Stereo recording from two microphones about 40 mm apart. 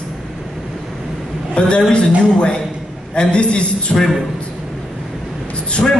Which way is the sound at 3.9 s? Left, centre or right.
Centre.